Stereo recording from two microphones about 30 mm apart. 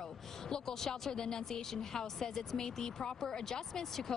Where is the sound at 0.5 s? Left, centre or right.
Centre.